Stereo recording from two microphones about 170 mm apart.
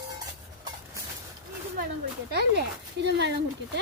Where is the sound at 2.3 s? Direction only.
75° right (ahead or behind); by 3.3 s 90° right.